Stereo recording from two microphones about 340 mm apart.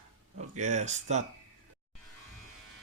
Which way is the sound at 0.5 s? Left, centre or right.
Right.